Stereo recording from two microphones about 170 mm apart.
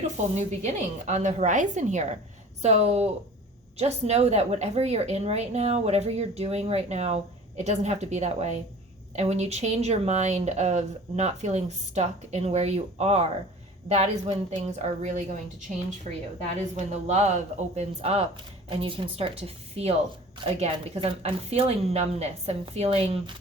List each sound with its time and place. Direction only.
0.0 s a woman's voice: 45° right (ahead or behind)
16.6 s a woman's voice: 40° right (ahead or behind)